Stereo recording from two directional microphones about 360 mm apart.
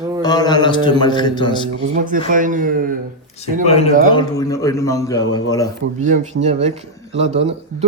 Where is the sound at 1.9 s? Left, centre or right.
Right.